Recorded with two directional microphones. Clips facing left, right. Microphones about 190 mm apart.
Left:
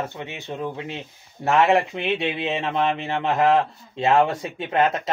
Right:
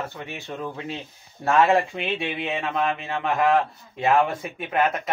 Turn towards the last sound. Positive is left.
turn(degrees=25)  # may be behind; listen again after turning